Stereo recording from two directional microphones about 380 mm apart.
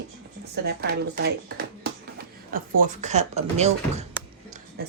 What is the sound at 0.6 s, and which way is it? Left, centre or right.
Speech, right.